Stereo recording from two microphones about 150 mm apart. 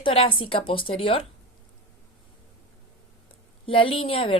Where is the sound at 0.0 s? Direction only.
35° left (ahead or behind).